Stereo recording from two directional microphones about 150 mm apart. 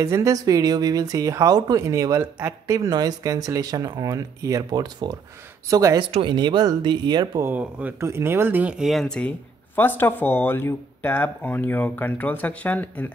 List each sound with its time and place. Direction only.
0.0 s speech: 20° right (ahead or behind)
5.9 s speech: 30° right (ahead or behind)
7.4 s speech: 10° right (ahead or behind); by 13.1 s 10° left (ahead or behind)